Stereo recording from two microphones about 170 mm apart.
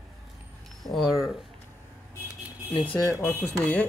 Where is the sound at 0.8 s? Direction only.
Centre (ahead or behind).